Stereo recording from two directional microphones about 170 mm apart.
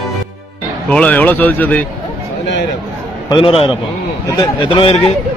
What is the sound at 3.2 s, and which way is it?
A man's voice, 30° left (ahead or behind).